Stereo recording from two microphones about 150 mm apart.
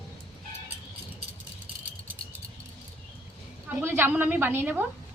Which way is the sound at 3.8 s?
15° right (ahead or behind).